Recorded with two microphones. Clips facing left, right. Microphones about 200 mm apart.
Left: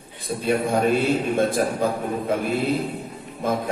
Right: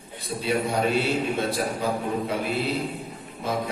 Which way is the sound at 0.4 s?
50° left (ahead or behind).